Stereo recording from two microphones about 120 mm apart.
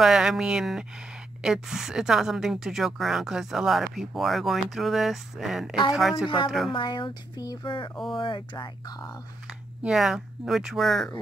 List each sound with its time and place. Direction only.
0.0 s a woman's voice: 5° right (ahead or behind)
6.2 s speech: 45° left (ahead or behind)
9.8 s a woman's voice: 5° right (ahead or behind)